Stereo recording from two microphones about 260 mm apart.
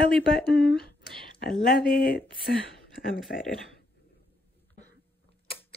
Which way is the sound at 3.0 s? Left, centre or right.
Left.